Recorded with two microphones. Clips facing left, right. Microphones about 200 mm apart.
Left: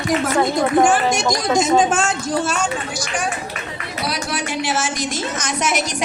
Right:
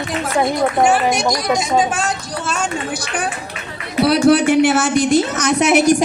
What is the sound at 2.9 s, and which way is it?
A woman's voice, 60° right (ahead or behind).